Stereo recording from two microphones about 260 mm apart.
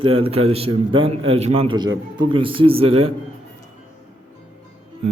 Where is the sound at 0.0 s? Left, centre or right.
Right.